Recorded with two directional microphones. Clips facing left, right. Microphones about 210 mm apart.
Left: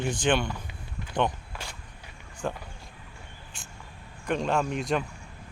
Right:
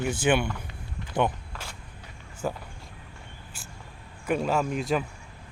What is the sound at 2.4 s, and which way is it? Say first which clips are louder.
Speech: right 1 dB; 5° right (ahead or behind).